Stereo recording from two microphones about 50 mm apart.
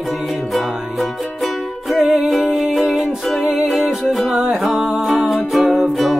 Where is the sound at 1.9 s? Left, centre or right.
Centre.